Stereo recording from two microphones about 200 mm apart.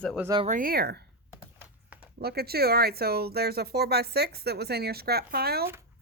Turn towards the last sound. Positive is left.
turn(degrees=-50)  # may be behind; listen again after turning